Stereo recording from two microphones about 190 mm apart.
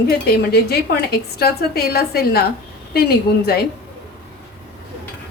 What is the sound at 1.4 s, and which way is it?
A woman's voice, 55° left (ahead or behind).